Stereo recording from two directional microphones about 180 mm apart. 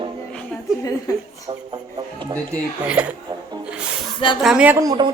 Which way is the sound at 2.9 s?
10° right (ahead or behind).